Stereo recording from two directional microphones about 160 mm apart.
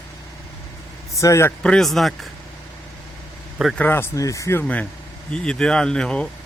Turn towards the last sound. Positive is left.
turn(degrees=5)  # may be behind; listen again after turning